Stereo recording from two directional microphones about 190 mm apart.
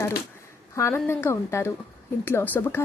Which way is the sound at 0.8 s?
15° left (ahead or behind).